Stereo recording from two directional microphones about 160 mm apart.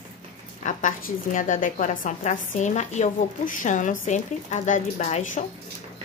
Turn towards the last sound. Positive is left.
turn(degrees=45)  # may be behind; listen again after turning